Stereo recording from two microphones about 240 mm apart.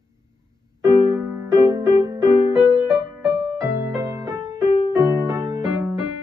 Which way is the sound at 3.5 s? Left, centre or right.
Centre.